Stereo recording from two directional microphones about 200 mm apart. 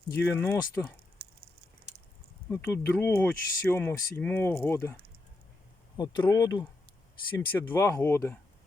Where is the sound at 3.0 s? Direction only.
10° left (ahead or behind).